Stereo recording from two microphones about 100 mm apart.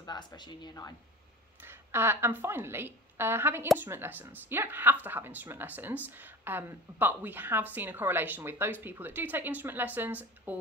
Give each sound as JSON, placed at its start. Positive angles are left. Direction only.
{"t": 0.0, "sound": "speech", "side_deg": 45}
{"t": 1.6, "sound": "a woman's voice", "side_deg": -25}